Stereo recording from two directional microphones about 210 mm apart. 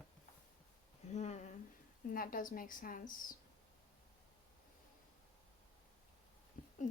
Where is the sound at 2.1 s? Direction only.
40° left (ahead or behind).